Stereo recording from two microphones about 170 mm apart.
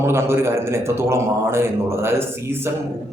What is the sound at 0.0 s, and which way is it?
A man's voice, 15° right (ahead or behind).